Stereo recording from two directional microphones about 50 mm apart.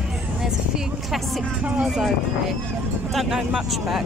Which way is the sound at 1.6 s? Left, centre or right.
Right.